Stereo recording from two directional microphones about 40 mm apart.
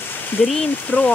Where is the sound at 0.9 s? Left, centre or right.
Left.